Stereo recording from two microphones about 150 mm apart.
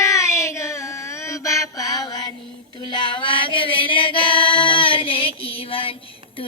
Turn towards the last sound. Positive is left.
turn(degrees=35)  # may be behind; listen again after turning